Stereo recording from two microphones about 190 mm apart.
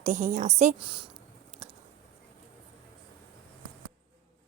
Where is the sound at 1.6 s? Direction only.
30° right (ahead or behind).